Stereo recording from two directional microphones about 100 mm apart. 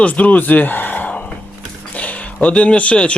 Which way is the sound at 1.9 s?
15° left (ahead or behind).